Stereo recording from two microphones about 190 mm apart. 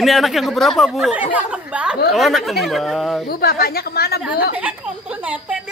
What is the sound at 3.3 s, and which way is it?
Speech, 55° left (ahead or behind).